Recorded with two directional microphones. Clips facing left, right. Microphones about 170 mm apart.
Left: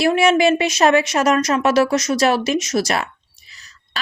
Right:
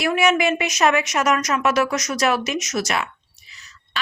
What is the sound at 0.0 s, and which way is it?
Speech, 30° left (ahead or behind).